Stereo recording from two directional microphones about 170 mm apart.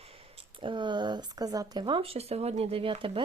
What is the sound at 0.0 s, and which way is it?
Speech, 35° right (ahead or behind).